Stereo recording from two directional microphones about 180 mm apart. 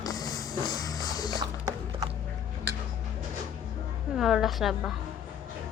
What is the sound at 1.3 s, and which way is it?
Music, 20° right (ahead or behind).